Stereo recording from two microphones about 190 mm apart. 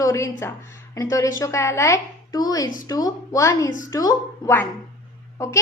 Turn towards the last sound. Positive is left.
turn(degrees=15)  # may be behind; listen again after turning